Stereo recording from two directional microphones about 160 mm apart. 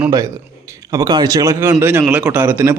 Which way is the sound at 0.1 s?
20° right (ahead or behind).